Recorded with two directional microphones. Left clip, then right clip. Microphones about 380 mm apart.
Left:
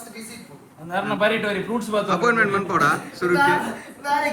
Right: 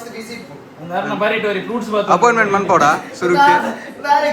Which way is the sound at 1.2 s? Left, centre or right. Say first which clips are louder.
Right 4 dB; left.